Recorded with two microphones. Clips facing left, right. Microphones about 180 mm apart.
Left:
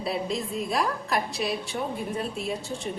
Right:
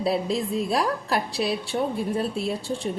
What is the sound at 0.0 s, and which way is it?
A woman's voice, 35° right (ahead or behind).